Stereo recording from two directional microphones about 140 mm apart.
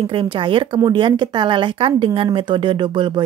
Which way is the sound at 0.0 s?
35° right (ahead or behind).